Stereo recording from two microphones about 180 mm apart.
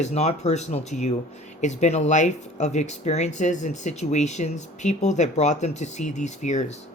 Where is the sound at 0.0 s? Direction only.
40° left (ahead or behind).